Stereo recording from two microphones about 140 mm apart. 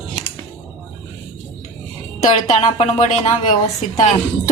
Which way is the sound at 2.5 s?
50° left (ahead or behind).